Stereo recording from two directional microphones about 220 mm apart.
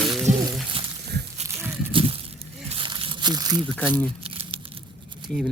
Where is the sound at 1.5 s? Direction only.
10° right (ahead or behind).